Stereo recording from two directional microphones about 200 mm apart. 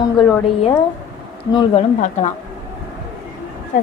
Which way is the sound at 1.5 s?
20° left (ahead or behind).